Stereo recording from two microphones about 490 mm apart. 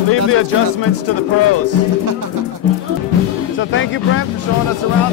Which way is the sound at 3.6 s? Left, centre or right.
Left.